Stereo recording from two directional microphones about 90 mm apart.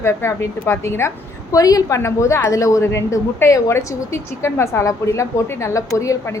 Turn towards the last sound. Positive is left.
turn(degrees=35)  # may be behind; listen again after turning